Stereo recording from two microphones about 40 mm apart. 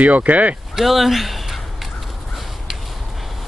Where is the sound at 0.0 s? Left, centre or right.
Right.